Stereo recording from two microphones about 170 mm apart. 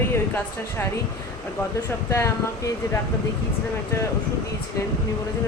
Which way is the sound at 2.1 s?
15° left (ahead or behind).